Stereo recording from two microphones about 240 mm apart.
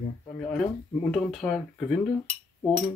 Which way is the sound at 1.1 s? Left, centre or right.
Centre.